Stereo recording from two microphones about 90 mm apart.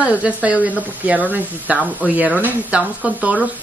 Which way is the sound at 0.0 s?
15° right (ahead or behind).